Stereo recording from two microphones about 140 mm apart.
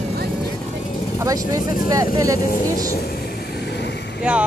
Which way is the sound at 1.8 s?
25° right (ahead or behind).